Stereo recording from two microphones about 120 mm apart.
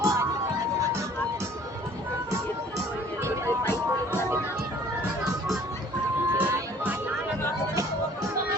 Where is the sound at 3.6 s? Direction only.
20° left (ahead or behind).